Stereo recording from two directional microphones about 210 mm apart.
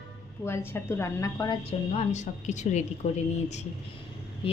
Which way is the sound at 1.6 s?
30° left (ahead or behind).